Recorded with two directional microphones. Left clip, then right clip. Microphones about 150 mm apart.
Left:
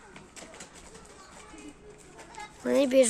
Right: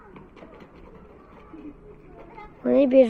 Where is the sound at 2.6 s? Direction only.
Centre (ahead or behind).